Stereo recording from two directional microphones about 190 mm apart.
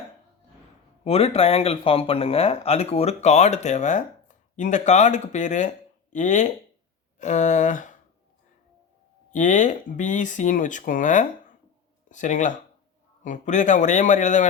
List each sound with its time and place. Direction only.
1.0 s speech: 30° left (ahead or behind)
9.3 s speech: 40° left (ahead or behind)